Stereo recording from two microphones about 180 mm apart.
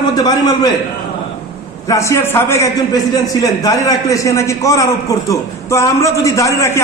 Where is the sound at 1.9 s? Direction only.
15° left (ahead or behind).